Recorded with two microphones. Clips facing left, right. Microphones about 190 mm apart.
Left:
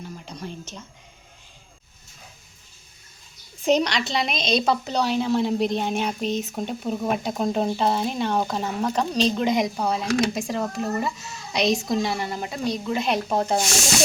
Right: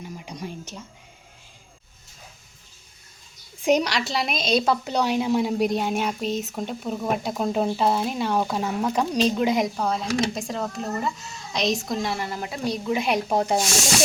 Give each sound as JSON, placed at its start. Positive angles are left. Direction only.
{"t": 0.0, "sound": "speech", "side_deg": -10}
{"t": 3.6, "sound": "a woman's voice", "side_deg": -10}
{"t": 11.6, "sound": "a woman's voice", "side_deg": 0}